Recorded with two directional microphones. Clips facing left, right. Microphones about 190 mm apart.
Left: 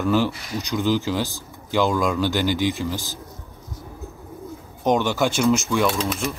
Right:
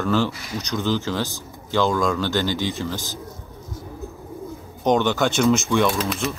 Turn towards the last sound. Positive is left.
turn(degrees=0)  # may be behind; listen again after turning